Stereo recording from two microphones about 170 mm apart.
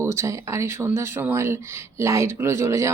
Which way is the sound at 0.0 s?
15° right (ahead or behind).